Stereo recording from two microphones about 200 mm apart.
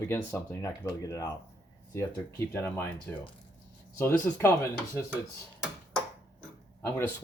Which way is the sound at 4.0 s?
10° left (ahead or behind).